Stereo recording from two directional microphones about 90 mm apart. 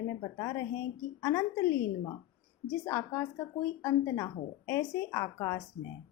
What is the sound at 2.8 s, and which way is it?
Speech, 30° left (ahead or behind).